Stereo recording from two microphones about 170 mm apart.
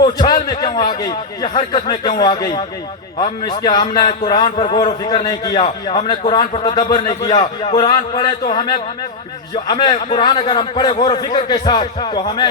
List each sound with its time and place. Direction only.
0.0 s a man's voice: 25° left (ahead or behind)